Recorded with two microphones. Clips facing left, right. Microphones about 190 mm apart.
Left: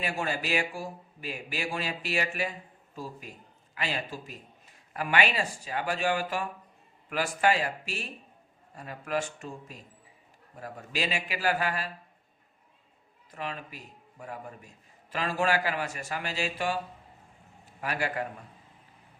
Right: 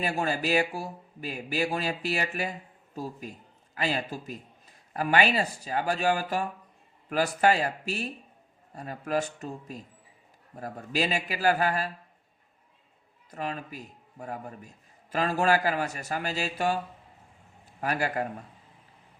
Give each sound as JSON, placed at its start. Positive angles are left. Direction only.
{"t": 0.0, "sound": "speech", "side_deg": -40}
{"t": 13.3, "sound": "speech", "side_deg": -40}
{"t": 15.1, "sound": "speech", "side_deg": -40}